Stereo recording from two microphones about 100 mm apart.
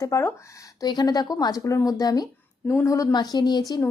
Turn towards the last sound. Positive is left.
turn(degrees=45)  # may be behind; listen again after turning